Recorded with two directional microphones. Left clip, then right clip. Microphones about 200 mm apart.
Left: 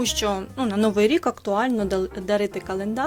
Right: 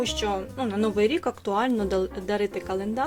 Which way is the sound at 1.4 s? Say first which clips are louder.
Left 2 dB; 20° left (ahead or behind).